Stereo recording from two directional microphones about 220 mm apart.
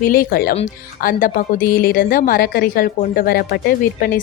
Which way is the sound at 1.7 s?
40° left (ahead or behind).